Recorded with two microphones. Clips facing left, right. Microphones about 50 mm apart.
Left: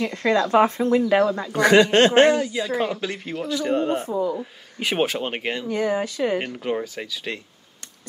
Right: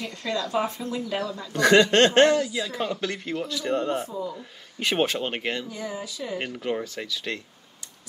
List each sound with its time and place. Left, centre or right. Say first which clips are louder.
0.0 s speech: left 9 dB; left
1.5 s speech: left 1 dB; centre
3.0 s speech: left 1 dB; centre
4.1 s speech: left 8 dB; left
4.4 s speech: left 3 dB; centre
5.7 s speech: left 10 dB; left
6.6 s speech: left 3 dB; centre